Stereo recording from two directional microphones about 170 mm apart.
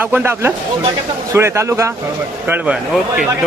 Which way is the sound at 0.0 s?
10° right (ahead or behind).